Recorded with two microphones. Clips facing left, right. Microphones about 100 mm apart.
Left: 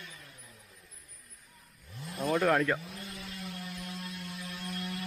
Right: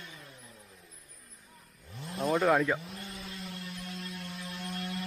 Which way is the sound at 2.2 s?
Centre (ahead or behind).